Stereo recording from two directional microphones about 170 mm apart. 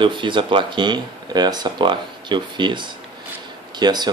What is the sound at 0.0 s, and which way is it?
Speech, 30° right (ahead or behind).